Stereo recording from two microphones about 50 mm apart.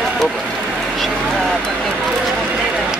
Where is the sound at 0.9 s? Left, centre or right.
Centre.